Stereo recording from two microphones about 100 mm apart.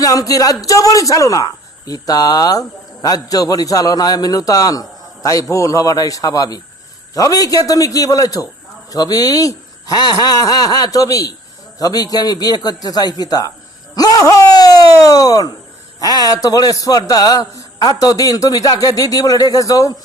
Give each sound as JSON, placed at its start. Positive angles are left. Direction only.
{"t": 0.0, "sound": "a man's voice", "side_deg": 35}